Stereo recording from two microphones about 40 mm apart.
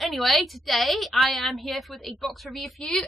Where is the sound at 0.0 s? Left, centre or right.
Centre.